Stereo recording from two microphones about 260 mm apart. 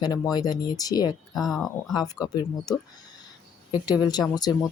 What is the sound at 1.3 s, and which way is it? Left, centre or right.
Speech, centre.